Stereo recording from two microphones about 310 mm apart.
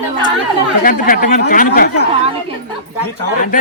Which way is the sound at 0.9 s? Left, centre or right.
Left.